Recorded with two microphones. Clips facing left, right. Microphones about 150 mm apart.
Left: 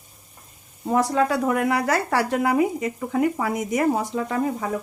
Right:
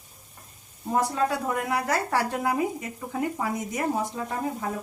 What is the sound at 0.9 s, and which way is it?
A woman's voice, 85° left.